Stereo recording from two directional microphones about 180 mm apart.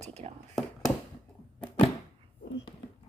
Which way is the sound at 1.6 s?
30° left (ahead or behind).